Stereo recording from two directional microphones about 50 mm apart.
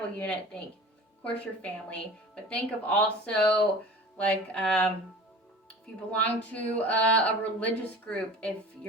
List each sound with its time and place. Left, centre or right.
0.2 s speech: left